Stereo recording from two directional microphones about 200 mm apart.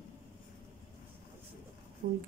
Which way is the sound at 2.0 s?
50° right (ahead or behind).